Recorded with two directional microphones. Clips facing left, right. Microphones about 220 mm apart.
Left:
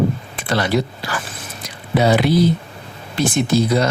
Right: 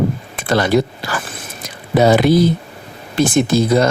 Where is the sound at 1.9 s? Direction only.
45° right (ahead or behind).